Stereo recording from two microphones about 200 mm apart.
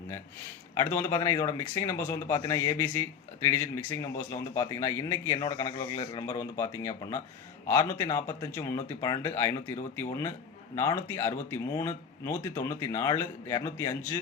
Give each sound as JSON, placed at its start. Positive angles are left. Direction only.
{"t": 0.7, "sound": "a man's voice", "side_deg": 15}